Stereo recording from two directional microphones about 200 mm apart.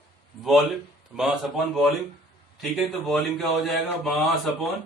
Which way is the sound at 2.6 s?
Centre (ahead or behind).